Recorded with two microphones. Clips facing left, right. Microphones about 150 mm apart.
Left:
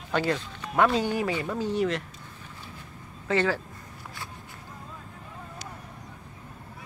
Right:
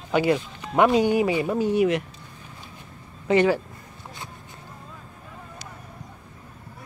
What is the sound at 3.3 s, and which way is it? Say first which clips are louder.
Speech: right 6 dB; 15° right (ahead or behind).